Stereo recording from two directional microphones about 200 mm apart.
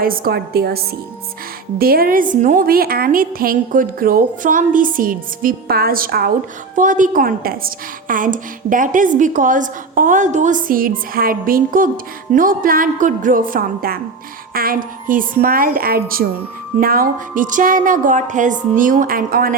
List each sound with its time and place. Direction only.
0.0 s a woman's voice: 50° right (ahead or behind)
1.8 s a woman's voice: 50° right (ahead or behind)